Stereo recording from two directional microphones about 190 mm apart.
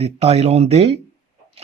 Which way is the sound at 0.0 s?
35° right (ahead or behind).